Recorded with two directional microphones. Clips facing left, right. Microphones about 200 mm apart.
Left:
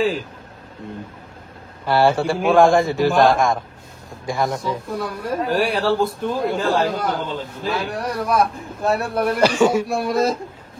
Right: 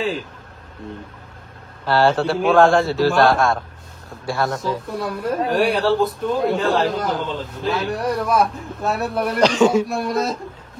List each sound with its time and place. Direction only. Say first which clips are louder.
1.9 s a man's voice: even; 10° left (ahead or behind)
4.6 s speech: even; centre (ahead or behind)